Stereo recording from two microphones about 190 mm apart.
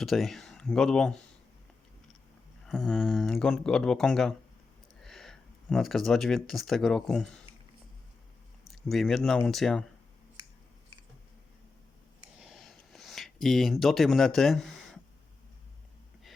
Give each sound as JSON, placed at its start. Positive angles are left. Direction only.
{"t": 0.0, "sound": "speech", "side_deg": 0}
{"t": 2.6, "sound": "speech", "side_deg": 0}
{"t": 8.6, "sound": "speech", "side_deg": 0}
{"t": 12.4, "sound": "a sound", "side_deg": 0}